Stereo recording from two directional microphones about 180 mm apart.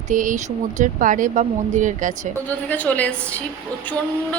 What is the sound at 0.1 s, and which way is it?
Speech, 45° right (ahead or behind).